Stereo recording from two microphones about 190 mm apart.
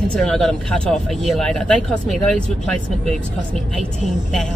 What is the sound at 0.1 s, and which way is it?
Speech, 5° left (ahead or behind).